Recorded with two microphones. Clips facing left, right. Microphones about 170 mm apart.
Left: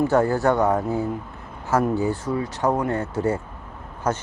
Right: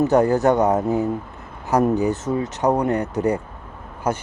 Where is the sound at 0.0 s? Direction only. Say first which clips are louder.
Right 3 dB; 20° right (ahead or behind).